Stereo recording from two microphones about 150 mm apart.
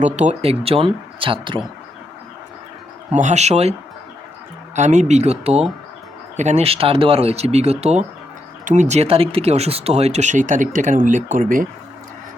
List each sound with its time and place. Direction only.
0.0 s speech: 50° right (ahead or behind)
3.1 s speech: 50° right (ahead or behind)